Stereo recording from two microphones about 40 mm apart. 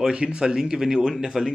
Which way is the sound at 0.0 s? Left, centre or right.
Right.